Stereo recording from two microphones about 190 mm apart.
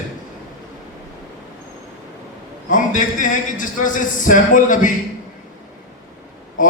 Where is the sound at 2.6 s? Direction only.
45° left (ahead or behind).